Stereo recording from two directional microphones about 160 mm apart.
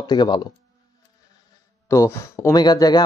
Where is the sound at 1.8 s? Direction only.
20° left (ahead or behind).